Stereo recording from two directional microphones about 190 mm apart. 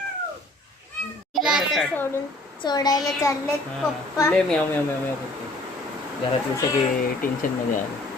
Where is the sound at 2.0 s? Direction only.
15° left (ahead or behind).